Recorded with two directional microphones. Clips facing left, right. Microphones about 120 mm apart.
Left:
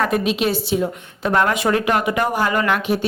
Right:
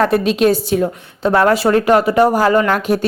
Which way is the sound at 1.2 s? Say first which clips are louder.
Right 5 dB; 30° right (ahead or behind).